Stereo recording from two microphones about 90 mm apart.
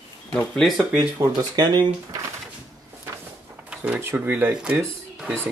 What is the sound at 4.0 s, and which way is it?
Speech, 20° right (ahead or behind).